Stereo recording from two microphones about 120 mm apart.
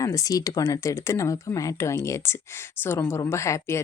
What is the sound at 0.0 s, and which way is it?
Speech, 25° left (ahead or behind).